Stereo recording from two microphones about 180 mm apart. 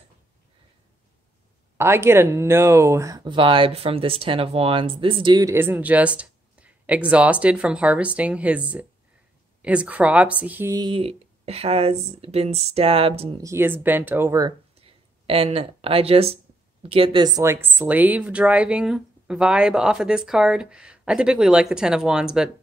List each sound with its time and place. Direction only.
1.8 s speech: 15° right (ahead or behind)
10.8 s speech: 30° right (ahead or behind)
13.4 s speech: 15° right (ahead or behind)
14.8 s speech: 30° right (ahead or behind); by 22.5 s 5° right (ahead or behind)